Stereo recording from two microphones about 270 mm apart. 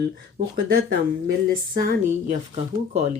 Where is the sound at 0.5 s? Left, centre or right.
Right.